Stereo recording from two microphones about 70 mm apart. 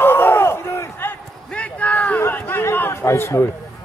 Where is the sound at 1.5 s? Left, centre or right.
Centre; by 3.4 s left.